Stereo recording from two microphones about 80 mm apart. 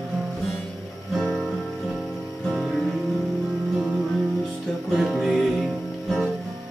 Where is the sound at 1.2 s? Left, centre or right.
Centre.